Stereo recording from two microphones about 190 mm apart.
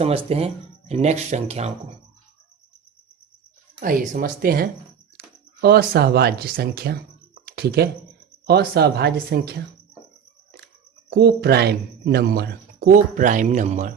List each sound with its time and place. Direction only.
0.3 s speech: 30° right (ahead or behind)
3.8 s speech: 45° right (ahead or behind)
7.4 s a sound: 55° right (ahead or behind)
8.4 s speech: 55° right (ahead or behind)
11.1 s speech: 55° right (ahead or behind); by 13.9 s 35° right (ahead or behind)